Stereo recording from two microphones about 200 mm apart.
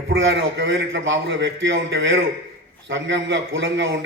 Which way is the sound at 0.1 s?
60° right (ahead or behind).